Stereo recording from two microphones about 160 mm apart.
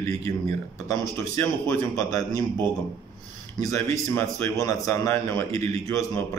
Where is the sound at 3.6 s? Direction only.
15° left (ahead or behind).